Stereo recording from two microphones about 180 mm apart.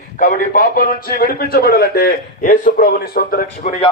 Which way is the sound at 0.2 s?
50° left (ahead or behind).